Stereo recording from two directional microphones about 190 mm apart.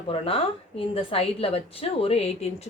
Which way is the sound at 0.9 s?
30° left (ahead or behind).